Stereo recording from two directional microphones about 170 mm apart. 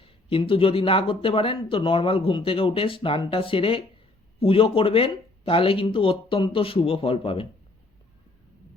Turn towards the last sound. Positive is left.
turn(degrees=30)  # may be behind; listen again after turning